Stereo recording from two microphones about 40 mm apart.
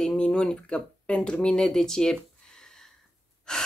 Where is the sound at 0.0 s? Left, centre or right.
Centre.